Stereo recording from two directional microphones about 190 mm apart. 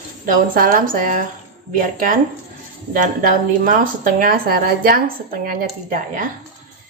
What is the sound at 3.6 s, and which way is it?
A woman's voice, 45° right (ahead or behind).